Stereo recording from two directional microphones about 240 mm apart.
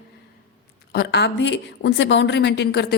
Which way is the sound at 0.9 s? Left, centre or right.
Left.